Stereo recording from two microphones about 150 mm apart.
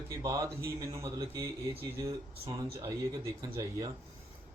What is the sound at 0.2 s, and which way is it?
A man's voice, 20° right (ahead or behind).